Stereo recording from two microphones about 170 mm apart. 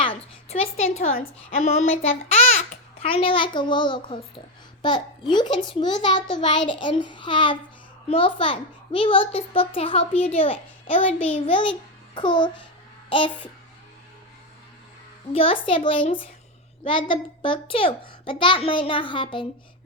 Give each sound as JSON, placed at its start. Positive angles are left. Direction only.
{"t": 0.0, "sound": "a sound", "side_deg": 35}
{"t": 1.5, "sound": "a child's voice", "side_deg": 40}
{"t": 15.3, "sound": "a child's voice", "side_deg": 35}